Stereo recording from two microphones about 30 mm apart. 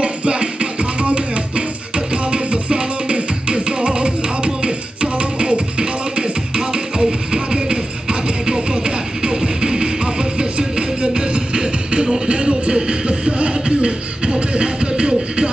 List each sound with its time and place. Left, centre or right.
0.0 s music: right